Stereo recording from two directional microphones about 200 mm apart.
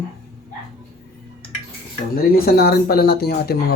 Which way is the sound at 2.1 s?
50° left (ahead or behind).